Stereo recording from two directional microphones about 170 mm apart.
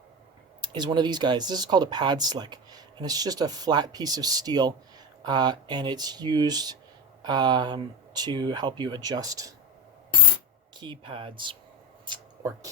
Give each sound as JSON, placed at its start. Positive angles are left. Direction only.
{"t": 0.6, "sound": "speech", "side_deg": -25}
{"t": 10.8, "sound": "speech", "side_deg": -30}
{"t": 12.0, "sound": "a sound", "side_deg": -25}